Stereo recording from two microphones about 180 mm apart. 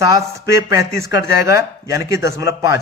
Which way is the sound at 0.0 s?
15° right (ahead or behind).